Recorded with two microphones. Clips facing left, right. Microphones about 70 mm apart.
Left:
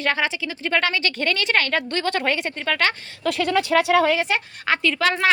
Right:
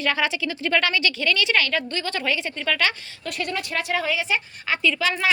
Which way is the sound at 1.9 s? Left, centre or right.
Left.